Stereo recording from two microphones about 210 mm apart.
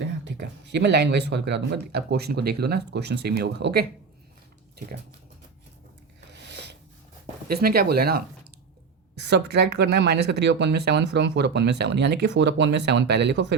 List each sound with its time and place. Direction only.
0.3 s speech: 55° right (ahead or behind)
6.3 s a sound: 55° right (ahead or behind)
7.4 s speech: 45° right (ahead or behind)
9.2 s speech: 55° right (ahead or behind)